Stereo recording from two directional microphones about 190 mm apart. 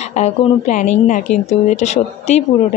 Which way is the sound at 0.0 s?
35° left (ahead or behind).